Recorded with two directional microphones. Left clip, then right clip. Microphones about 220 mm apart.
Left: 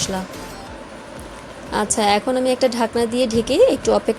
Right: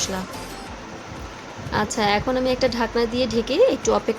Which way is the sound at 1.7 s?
15° left (ahead or behind).